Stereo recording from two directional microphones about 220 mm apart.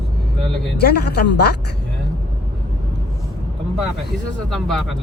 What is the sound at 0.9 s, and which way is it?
Speech, 50° left (ahead or behind).